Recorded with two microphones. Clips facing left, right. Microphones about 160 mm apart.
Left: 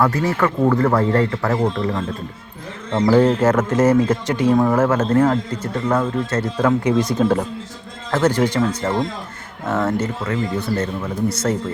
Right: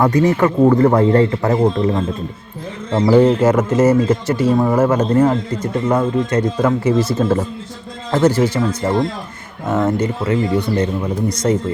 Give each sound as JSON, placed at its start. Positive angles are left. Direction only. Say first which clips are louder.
{"t": 0.0, "sound": "speech", "louder": "right 4 dB", "side_deg": -15}
{"t": 6.7, "sound": "speech", "louder": "left 2 dB", "side_deg": -5}